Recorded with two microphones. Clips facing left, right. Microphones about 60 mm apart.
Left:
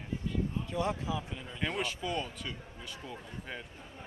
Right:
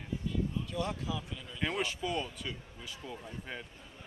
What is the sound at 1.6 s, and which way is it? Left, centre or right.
Speech, centre.